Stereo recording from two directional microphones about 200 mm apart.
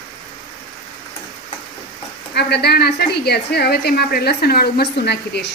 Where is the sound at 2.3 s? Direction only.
55° left (ahead or behind).